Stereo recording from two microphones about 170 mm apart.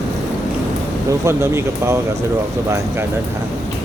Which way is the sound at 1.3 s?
15° right (ahead or behind).